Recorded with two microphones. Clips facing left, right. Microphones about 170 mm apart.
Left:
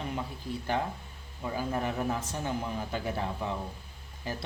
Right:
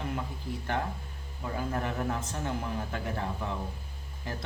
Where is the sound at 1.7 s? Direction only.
15° left (ahead or behind).